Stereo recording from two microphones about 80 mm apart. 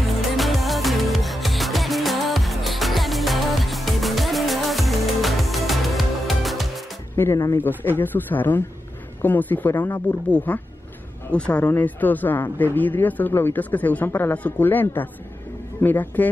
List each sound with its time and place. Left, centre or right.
0.4 s music: centre
7.2 s speech: left